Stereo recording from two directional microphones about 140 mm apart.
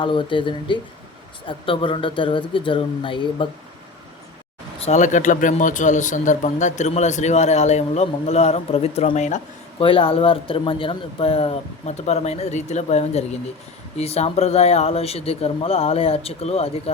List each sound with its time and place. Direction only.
0.0 s speech: 35° left (ahead or behind)
4.9 s speech: 60° left (ahead or behind)
9.8 s speech: 40° left (ahead or behind)